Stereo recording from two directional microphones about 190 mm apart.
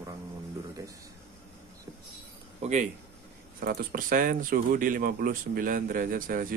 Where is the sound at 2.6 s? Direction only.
40° right (ahead or behind).